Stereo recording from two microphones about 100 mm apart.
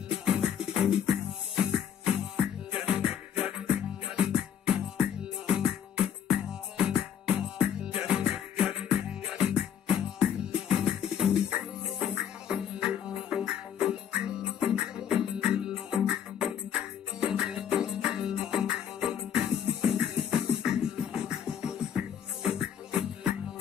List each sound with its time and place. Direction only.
0.2 s music: 5° right (ahead or behind)